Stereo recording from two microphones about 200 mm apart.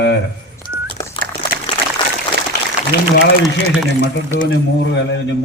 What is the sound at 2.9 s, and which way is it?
Speech, 60° left (ahead or behind).